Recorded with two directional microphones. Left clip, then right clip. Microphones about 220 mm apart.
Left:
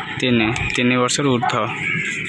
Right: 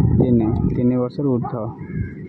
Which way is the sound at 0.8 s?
15° left (ahead or behind).